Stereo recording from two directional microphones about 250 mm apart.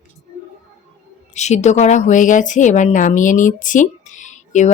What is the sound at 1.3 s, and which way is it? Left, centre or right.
A woman's voice, left.